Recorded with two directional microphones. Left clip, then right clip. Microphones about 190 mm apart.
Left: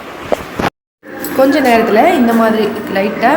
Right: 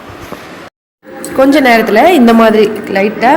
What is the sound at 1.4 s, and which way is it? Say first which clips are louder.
Speech: right 3 dB; 30° right (ahead or behind).